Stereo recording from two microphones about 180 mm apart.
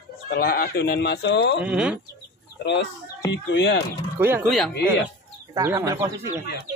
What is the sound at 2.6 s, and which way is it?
Speech, 75° left (ahead or behind).